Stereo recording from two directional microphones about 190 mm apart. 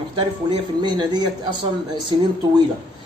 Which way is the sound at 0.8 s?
20° right (ahead or behind).